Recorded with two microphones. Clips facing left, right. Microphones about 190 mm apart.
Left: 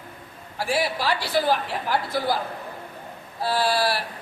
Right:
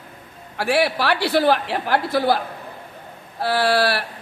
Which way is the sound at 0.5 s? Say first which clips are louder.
Right 5 dB; 70° right (ahead or behind).